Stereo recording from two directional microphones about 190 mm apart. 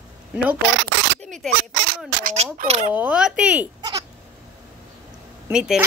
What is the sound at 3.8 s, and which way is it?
Bleat, 20° right (ahead or behind).